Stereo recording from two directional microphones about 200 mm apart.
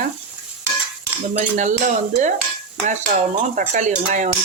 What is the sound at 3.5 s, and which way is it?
Speech, 40° right (ahead or behind).